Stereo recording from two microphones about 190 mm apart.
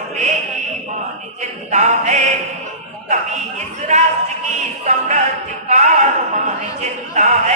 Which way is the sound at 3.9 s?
35° right (ahead or behind).